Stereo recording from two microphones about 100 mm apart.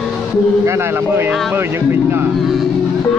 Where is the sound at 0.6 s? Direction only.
25° right (ahead or behind).